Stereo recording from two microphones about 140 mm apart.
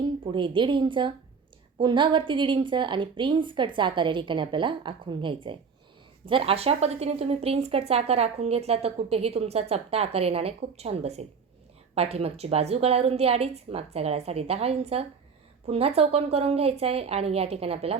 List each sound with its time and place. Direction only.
0.3 s a woman's voice: 35° right (ahead or behind)